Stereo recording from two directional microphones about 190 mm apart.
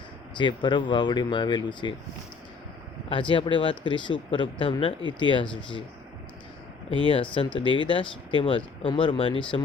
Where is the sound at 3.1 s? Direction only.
25° left (ahead or behind).